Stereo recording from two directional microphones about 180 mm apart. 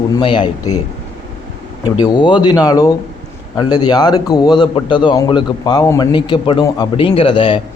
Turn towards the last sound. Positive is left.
turn(degrees=25)  # may be behind; listen again after turning